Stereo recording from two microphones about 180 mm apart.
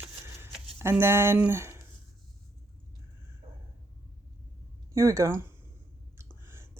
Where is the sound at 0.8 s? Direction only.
15° right (ahead or behind).